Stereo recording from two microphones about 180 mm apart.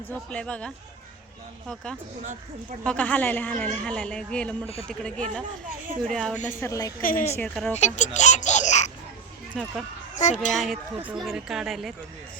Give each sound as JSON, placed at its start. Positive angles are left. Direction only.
{"t": 0.1, "sound": "speech", "side_deg": 5}
{"t": 6.3, "sound": "a child's voice", "side_deg": 40}
{"t": 6.6, "sound": "speech", "side_deg": 20}
{"t": 7.0, "sound": "a child's voice", "side_deg": 50}
{"t": 7.3, "sound": "speech", "side_deg": 5}
{"t": 7.8, "sound": "speech", "side_deg": 40}
{"t": 9.5, "sound": "speech", "side_deg": 0}
{"t": 10.2, "sound": "a child's voice", "side_deg": 40}
{"t": 11.1, "sound": "speech", "side_deg": 0}